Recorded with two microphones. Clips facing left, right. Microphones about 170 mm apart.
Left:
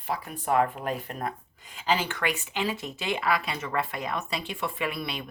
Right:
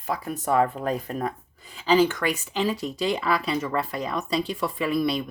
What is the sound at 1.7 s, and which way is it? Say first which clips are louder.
Speech: right 8 dB; 40° right (ahead or behind).